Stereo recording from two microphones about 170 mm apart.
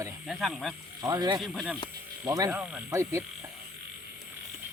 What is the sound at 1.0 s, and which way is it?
Speech, 20° right (ahead or behind).